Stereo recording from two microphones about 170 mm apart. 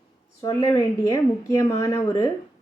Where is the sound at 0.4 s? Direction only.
20° left (ahead or behind).